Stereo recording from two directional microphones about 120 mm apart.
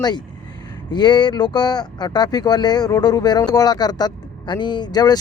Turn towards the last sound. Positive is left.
turn(degrees=35)  # may be behind; listen again after turning